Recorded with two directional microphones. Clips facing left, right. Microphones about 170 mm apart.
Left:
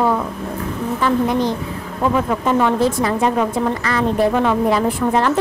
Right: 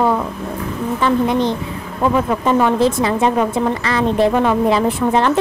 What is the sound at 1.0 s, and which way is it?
A woman's voice, 25° right (ahead or behind).